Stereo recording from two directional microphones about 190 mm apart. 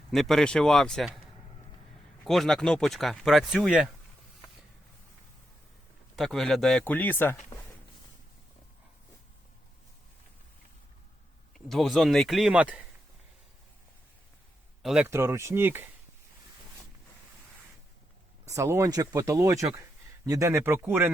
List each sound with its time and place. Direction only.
0.1 s speech: centre (ahead or behind)
2.2 s speech: centre (ahead or behind)
6.1 s speech: centre (ahead or behind)
11.5 s speech: centre (ahead or behind)
14.8 s speech: 5° right (ahead or behind)
18.4 s speech: 15° right (ahead or behind)